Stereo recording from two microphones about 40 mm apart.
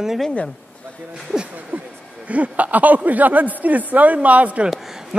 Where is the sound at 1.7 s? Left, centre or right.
Right.